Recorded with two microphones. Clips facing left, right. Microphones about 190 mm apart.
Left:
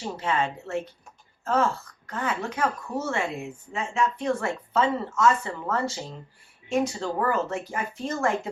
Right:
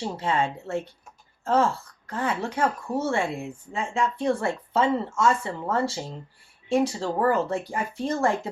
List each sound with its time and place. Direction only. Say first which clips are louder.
0.0 s speech: right 1 dB; 30° right (ahead or behind)